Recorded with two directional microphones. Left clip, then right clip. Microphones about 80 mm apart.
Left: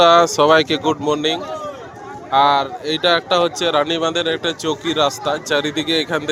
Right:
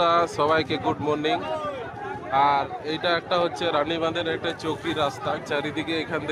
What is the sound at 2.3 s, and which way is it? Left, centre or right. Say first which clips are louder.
A man's voice: left 7 dB; left.